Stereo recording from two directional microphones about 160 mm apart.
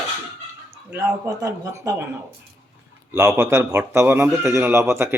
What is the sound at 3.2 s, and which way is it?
Speech, 20° right (ahead or behind).